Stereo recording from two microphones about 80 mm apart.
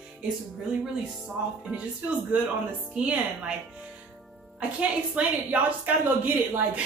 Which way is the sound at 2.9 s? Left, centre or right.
Centre.